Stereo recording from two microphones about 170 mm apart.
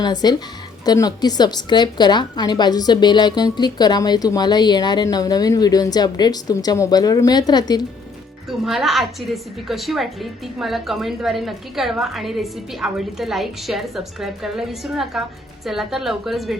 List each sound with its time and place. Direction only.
0.0 s a woman's voice: 25° left (ahead or behind)
8.4 s a woman's voice: centre (ahead or behind)